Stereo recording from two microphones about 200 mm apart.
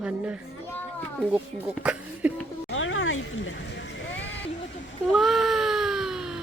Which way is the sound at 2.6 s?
80° left.